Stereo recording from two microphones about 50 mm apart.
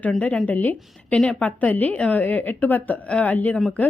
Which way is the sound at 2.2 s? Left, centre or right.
Left.